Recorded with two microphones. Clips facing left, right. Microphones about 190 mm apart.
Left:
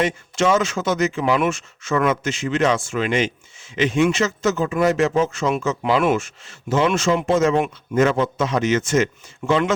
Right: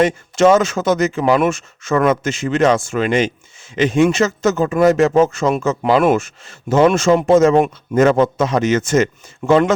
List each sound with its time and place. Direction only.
0.0 s speech: 45° right (ahead or behind)